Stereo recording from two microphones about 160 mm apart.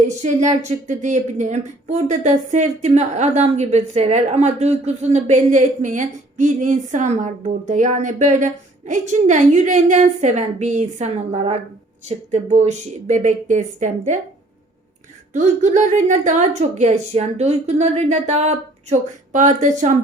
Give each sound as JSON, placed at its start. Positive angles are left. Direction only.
{"t": 0.0, "sound": "speech", "side_deg": -45}
{"t": 15.3, "sound": "speech", "side_deg": -50}